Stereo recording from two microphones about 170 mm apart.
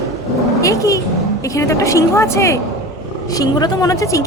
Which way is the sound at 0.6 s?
20° left (ahead or behind).